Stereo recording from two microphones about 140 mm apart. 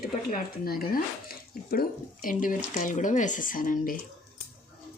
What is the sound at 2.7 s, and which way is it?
Speech, 65° left (ahead or behind).